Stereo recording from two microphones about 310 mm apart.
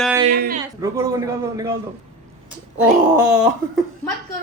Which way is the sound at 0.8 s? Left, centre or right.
Centre.